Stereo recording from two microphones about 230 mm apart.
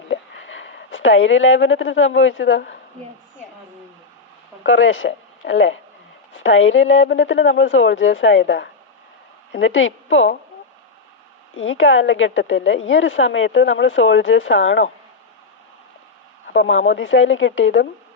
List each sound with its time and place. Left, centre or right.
0.1 s speech: left
4.6 s a woman's voice: left
11.5 s a woman's voice: left
16.5 s a woman's voice: left